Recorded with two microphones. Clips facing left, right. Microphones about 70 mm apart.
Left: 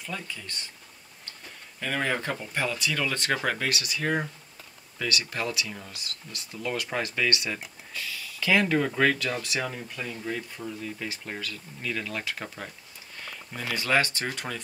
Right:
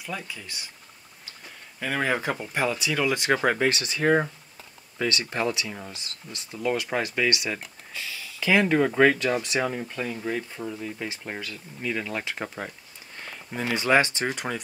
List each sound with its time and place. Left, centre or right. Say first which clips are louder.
0.0 s speech: right 2 dB; centre
1.8 s speech: right 2 dB; centre